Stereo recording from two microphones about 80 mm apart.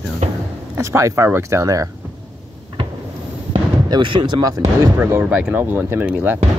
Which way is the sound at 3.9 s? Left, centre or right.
Right.